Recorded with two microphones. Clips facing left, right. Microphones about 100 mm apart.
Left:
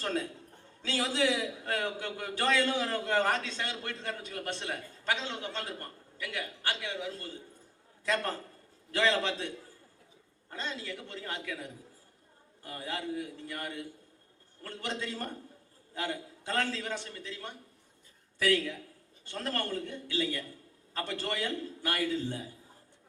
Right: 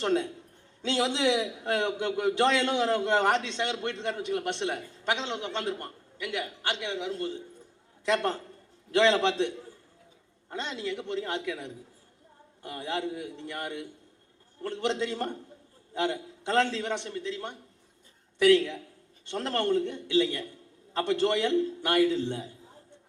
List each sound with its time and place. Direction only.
0.0 s a man's voice: 25° right (ahead or behind)
10.5 s a man's voice: 25° right (ahead or behind)